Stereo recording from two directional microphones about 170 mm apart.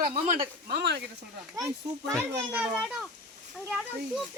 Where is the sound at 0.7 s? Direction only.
75° right (ahead or behind).